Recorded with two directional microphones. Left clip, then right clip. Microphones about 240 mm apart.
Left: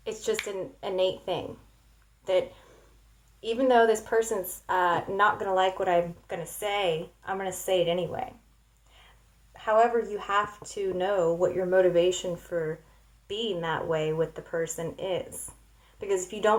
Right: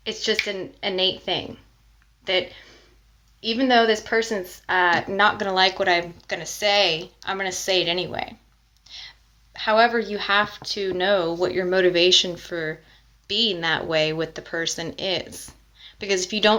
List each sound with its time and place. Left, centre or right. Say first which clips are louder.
0.0 s speech: right 6 dB; right
3.4 s a woman's voice: right 3 dB; right
9.5 s a woman's voice: right 4 dB; right